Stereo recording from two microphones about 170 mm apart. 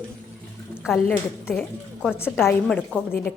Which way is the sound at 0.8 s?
5° left (ahead or behind).